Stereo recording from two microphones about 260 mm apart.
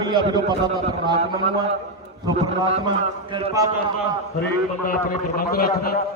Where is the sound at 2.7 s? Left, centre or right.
Centre.